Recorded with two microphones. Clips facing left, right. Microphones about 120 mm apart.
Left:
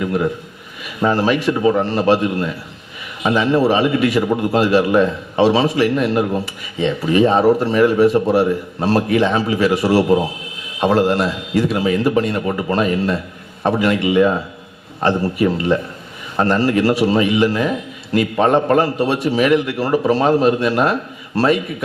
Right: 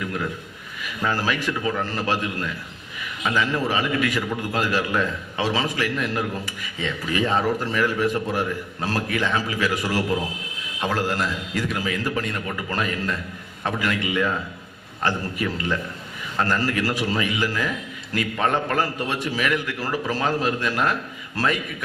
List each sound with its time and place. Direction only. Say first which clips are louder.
0.0 s a man's voice: left 9 dB; 25° left (ahead or behind)